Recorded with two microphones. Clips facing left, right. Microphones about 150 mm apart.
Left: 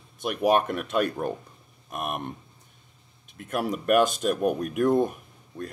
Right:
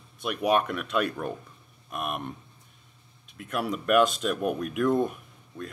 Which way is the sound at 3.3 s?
45° left (ahead or behind).